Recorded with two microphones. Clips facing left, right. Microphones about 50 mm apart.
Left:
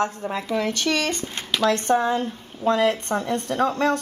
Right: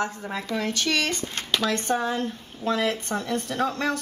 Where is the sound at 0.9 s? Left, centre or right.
Left.